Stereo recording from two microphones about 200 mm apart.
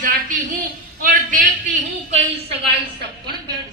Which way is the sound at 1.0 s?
40° right (ahead or behind).